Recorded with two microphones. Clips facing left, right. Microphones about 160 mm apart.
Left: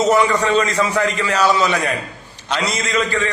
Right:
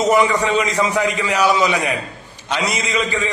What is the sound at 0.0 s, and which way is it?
A man's voice, 15° right (ahead or behind).